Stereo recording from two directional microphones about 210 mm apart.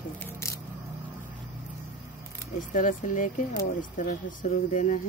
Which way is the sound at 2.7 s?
40° left (ahead or behind).